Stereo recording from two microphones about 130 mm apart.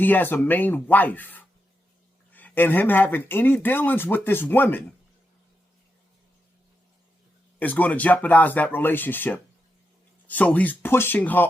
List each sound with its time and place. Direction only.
0.0 s speech: 15° left (ahead or behind)
7.6 s speech: 10° left (ahead or behind)